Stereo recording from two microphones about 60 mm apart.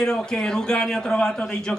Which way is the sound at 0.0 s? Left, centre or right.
Centre.